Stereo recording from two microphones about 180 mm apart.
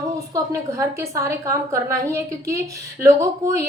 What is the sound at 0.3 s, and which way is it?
A woman's voice, 15° right (ahead or behind).